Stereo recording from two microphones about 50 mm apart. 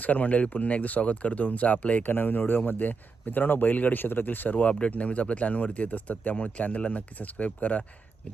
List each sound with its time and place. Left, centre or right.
0.0 s speech: left
4.7 s speech: left